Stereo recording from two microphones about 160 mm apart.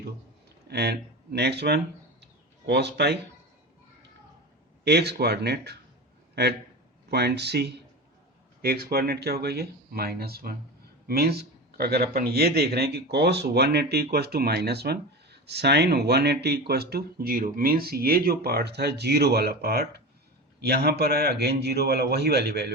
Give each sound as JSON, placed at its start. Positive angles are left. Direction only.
{"t": 0.7, "sound": "speech", "side_deg": -85}
{"t": 4.8, "sound": "speech", "side_deg": -90}
{"t": 7.1, "sound": "speech", "side_deg": -90}
{"t": 8.6, "sound": "a man's voice", "side_deg": -75}